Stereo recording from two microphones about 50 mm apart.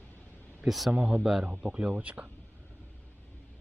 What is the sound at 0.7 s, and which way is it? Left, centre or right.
Speech, centre.